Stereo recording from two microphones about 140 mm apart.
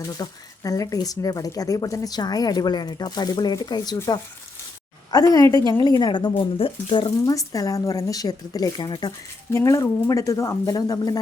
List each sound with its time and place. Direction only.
0.0 s speech: 25° left (ahead or behind)
9.5 s speech: 20° left (ahead or behind)